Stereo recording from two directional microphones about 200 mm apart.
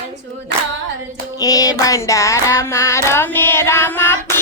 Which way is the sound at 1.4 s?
20° left (ahead or behind).